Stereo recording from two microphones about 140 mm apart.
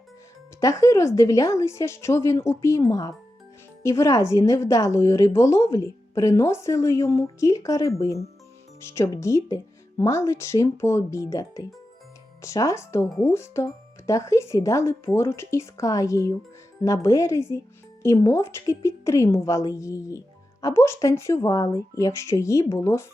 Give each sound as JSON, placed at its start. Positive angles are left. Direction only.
{"t": 0.6, "sound": "a woman's voice", "side_deg": 20}